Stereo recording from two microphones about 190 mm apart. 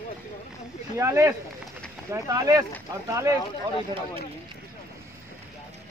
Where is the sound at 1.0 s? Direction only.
15° right (ahead or behind).